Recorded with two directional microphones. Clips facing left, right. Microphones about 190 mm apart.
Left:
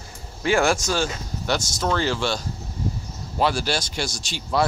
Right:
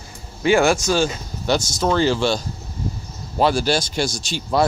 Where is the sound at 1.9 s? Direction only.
30° right (ahead or behind).